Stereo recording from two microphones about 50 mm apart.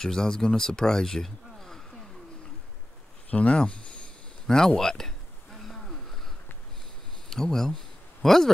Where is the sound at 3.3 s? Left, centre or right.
Left.